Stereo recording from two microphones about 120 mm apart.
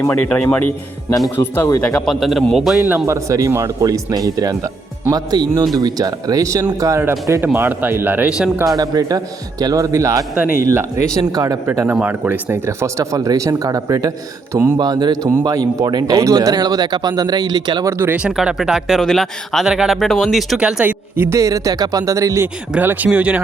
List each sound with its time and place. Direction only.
0.1 s speech: 10° left (ahead or behind)
1.8 s speech: 5° left (ahead or behind)
2.9 s speech: 25° right (ahead or behind)
8.6 s speech: 30° right (ahead or behind)
11.6 s speech: 20° right (ahead or behind)
14.5 s speech: 20° right (ahead or behind)
14.8 s speech: 35° right (ahead or behind)
17.8 s speech: 20° right (ahead or behind)
21.2 s speech: 25° right (ahead or behind)
22.7 s speech: 15° right (ahead or behind)